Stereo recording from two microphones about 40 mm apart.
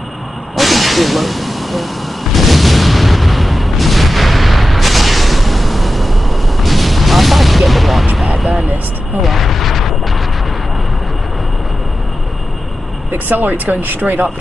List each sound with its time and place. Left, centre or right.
0.6 s hiss: centre
2.3 s boom: centre
8.4 s a sound: centre
13.3 s speech: right